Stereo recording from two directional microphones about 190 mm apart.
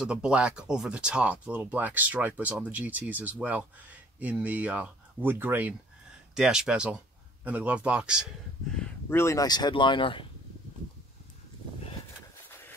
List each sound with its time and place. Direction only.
0.0 s speech: 5° right (ahead or behind)
8.7 s speech: 10° left (ahead or behind); by 10.2 s 25° left (ahead or behind)